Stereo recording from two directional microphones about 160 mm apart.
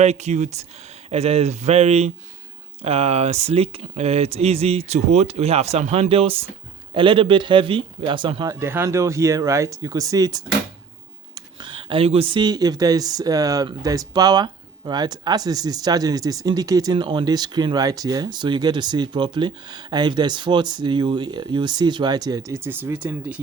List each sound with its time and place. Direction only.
0.0 s speech: 45° right (ahead or behind)
8.5 s speech: 15° right (ahead or behind)